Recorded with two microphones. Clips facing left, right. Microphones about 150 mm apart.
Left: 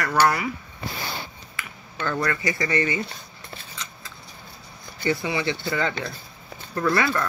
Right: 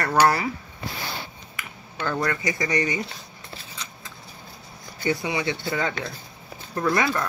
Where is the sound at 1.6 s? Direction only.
15° right (ahead or behind).